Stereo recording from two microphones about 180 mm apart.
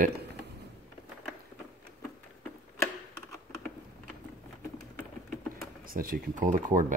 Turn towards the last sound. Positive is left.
turn(degrees=-45)  # may be behind; listen again after turning